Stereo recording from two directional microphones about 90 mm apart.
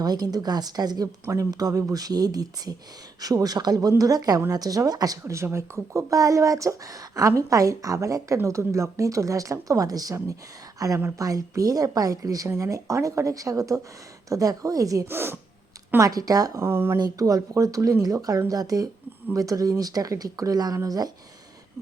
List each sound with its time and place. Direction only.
0.0 s speech: 45° right (ahead or behind)
5.2 s speech: 30° right (ahead or behind)
15.0 s speech: 25° right (ahead or behind)
16.0 s speech: 40° right (ahead or behind)
16.6 s speech: 25° right (ahead or behind)
17.0 s speech: 45° right (ahead or behind)